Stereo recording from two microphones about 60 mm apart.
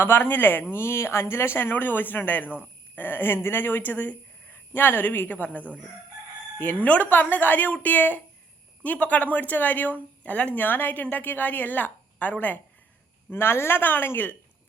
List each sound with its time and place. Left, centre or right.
0.0 s speech: left
1.7 s speech: left
6.8 s a woman's voice: left
13.3 s speech: left